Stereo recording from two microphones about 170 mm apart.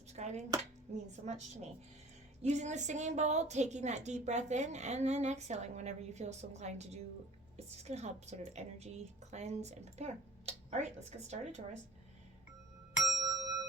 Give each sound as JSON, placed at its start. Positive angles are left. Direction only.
{"t": 0.2, "sound": "a woman's voice", "side_deg": -40}
{"t": 13.0, "sound": "bell", "side_deg": 0}
{"t": 13.2, "sound": "music", "side_deg": -20}